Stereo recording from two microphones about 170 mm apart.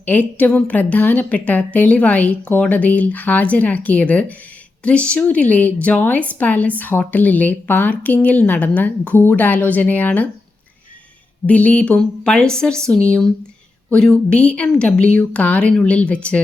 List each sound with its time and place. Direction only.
0.0 s a woman's voice: 10° left (ahead or behind)
11.4 s a woman's voice: 10° left (ahead or behind)